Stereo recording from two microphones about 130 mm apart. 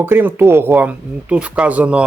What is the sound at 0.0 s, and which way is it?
Speech, 15° right (ahead or behind).